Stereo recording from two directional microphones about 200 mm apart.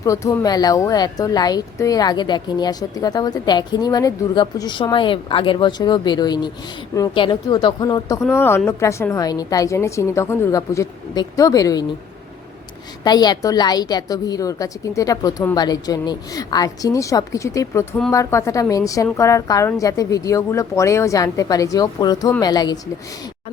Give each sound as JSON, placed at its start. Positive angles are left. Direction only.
{"t": 0.0, "sound": "a woman's voice", "side_deg": 15}
{"t": 13.1, "sound": "a woman's voice", "side_deg": 20}